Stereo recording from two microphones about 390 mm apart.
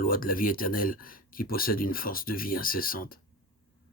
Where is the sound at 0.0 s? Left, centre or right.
Left.